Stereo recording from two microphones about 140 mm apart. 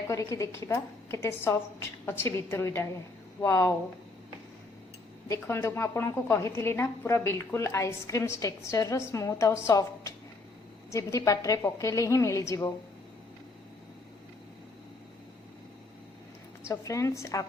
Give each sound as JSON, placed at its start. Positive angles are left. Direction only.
{"t": 0.1, "sound": "a woman's voice", "side_deg": 20}
{"t": 5.3, "sound": "a woman's voice", "side_deg": 20}
{"t": 16.6, "sound": "a woman's voice", "side_deg": 20}